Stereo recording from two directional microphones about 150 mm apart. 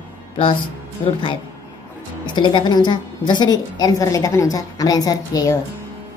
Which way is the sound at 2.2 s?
30° left (ahead or behind).